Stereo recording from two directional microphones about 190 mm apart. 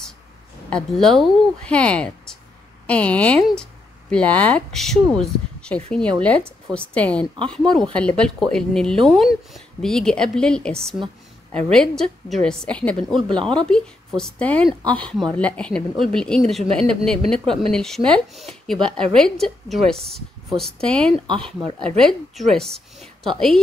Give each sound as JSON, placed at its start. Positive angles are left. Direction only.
{"t": 0.7, "sound": "a woman's voice", "side_deg": 5}